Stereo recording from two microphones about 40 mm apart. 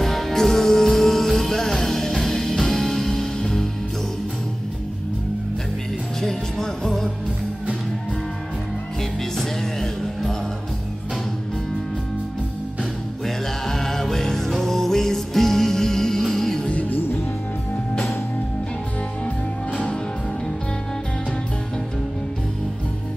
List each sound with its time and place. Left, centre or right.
0.0 s music: centre
3.3 s music: centre
6.2 s music: centre
9.4 s music: centre
13.7 s music: centre